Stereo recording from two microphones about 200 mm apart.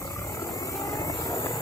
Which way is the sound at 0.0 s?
15° left (ahead or behind).